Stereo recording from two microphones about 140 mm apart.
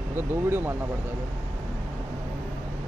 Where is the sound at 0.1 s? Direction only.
15° right (ahead or behind).